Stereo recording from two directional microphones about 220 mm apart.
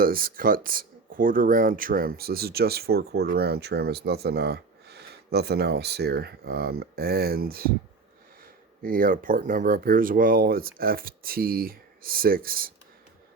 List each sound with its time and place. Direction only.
0.0 s speech: 40° right (ahead or behind)
8.8 s speech: 40° right (ahead or behind)